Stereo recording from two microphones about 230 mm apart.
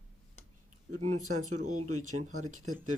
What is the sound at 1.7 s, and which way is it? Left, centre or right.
Speech, right.